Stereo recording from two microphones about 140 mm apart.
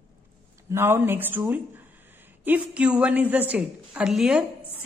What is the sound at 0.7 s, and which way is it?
A woman's voice, 15° right (ahead or behind).